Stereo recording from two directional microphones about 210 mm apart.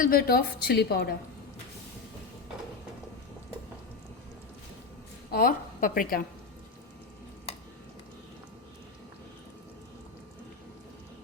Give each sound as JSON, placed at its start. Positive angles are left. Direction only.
{"t": 0.0, "sound": "a woman's voice", "side_deg": 45}
{"t": 5.3, "sound": "a woman's voice", "side_deg": 40}